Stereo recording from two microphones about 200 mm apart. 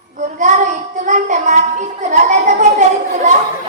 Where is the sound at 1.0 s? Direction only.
40° right (ahead or behind).